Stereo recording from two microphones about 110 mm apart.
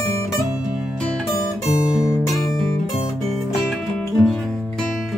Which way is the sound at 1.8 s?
10° right (ahead or behind).